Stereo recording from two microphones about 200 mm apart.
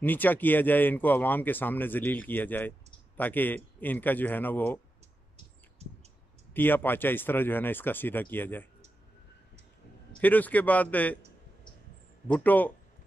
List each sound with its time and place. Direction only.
0.0 s speech: 10° left (ahead or behind)
5.8 s a sound: 30° right (ahead or behind)
6.5 s speech: 10° left (ahead or behind)
10.2 s speech: 10° left (ahead or behind)
12.3 s speech: 10° left (ahead or behind)